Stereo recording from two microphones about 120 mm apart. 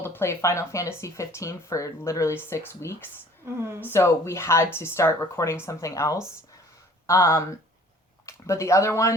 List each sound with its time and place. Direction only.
0.0 s speech: 20° left (ahead or behind)
3.4 s a woman's voice: 20° right (ahead or behind)
3.8 s speech: 20° left (ahead or behind)